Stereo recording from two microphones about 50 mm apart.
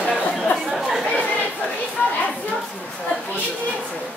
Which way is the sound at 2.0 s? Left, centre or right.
Left.